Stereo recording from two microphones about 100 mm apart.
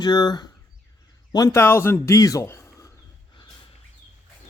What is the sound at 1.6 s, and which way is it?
Speech, 25° left (ahead or behind).